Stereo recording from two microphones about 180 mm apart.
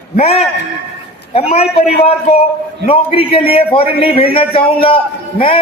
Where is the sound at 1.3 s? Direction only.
35° left (ahead or behind).